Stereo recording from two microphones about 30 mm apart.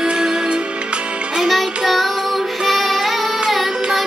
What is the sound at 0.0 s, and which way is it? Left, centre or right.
Music, right.